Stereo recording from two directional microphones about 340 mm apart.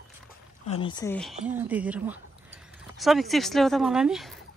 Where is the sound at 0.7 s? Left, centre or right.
Centre.